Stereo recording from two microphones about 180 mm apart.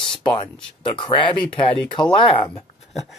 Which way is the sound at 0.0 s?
30° left (ahead or behind).